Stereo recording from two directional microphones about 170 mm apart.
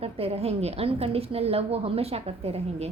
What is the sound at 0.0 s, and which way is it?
A woman's voice, 35° right (ahead or behind).